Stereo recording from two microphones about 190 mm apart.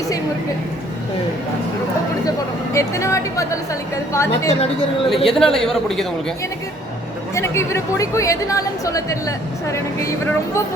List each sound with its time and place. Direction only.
2.7 s a woman's voice: 15° left (ahead or behind)
5.1 s speech: centre (ahead or behind)
7.3 s a woman's voice: 15° left (ahead or behind)